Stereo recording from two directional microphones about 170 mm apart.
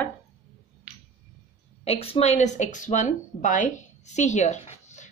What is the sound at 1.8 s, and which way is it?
Speech, 35° left (ahead or behind).